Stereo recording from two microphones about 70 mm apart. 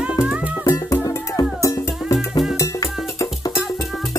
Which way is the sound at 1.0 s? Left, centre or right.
Left.